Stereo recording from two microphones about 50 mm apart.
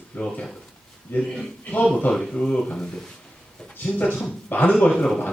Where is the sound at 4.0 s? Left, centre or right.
Left.